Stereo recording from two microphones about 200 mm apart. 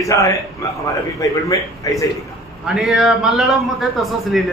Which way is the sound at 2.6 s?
5° right (ahead or behind).